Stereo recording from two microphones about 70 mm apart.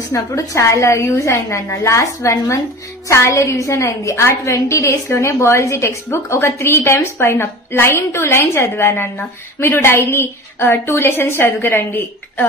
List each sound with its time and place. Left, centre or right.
0.1 s a woman's voice: left